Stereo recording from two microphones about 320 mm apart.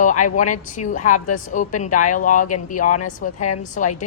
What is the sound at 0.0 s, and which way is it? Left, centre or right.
Speech, left.